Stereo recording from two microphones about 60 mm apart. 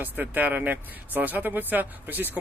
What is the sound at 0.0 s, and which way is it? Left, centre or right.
Speech, right.